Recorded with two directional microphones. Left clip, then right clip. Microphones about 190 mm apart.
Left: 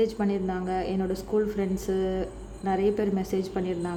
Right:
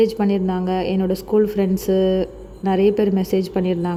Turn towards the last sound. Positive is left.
turn(degrees=-30)  # may be behind; listen again after turning